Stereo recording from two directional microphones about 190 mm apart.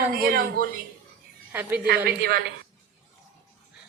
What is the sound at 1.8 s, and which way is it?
Speech, 50° right (ahead or behind).